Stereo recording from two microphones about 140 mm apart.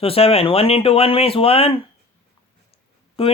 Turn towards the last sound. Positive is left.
turn(degrees=40)  # may be behind; listen again after turning